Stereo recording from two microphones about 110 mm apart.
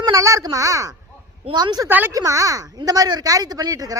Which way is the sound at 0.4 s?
30° right (ahead or behind).